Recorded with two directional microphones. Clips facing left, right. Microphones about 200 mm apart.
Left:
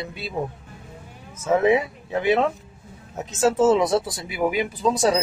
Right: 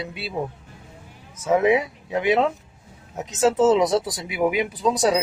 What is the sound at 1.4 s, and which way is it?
Speech, 10° right (ahead or behind).